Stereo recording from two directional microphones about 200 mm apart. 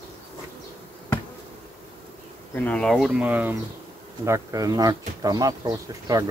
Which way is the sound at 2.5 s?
5° left (ahead or behind).